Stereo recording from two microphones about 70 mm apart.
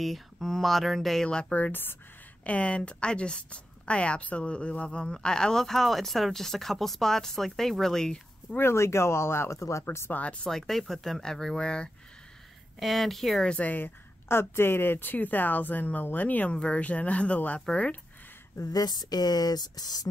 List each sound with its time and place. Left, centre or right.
0.0 s speech: centre; by 2.0 s left
2.4 s a woman's voice: centre
8.5 s speech: left
9.8 s speech: left
10.2 s speech: centre
10.5 s a woman's voice: centre
12.7 s speech: centre
13.5 s a woman's voice: left
18.6 s speech: left